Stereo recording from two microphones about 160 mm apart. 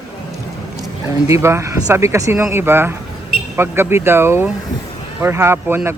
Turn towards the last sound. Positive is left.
turn(degrees=-15)  # may be behind; listen again after turning